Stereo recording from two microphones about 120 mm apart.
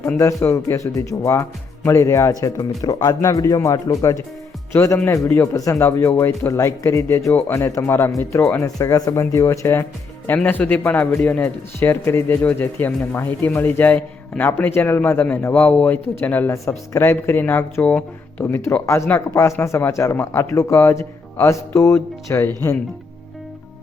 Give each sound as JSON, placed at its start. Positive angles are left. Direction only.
{"t": 0.2, "sound": "a man's voice", "side_deg": 25}